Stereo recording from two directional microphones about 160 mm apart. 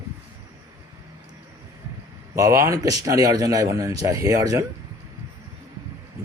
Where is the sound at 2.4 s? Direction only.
20° right (ahead or behind).